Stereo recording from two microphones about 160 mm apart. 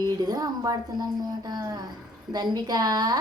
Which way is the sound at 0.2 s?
25° right (ahead or behind).